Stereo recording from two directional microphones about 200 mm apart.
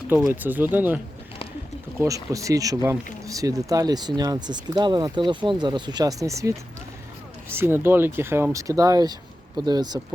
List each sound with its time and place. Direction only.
0.1 s speech: 10° right (ahead or behind)
7.5 s speech: 10° right (ahead or behind)